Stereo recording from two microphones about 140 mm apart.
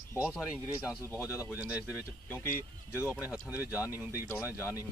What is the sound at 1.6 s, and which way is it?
Speech, 10° right (ahead or behind).